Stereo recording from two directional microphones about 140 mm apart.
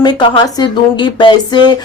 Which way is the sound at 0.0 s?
35° left (ahead or behind).